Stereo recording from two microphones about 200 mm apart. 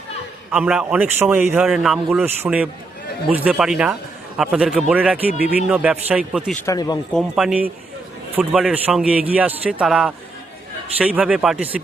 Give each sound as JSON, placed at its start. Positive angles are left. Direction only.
{"t": 0.5, "sound": "speech", "side_deg": -5}
{"t": 6.6, "sound": "speech", "side_deg": 15}
{"t": 7.1, "sound": "speech", "side_deg": 0}